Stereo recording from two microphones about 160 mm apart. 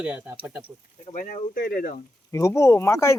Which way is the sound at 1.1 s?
55° left (ahead or behind).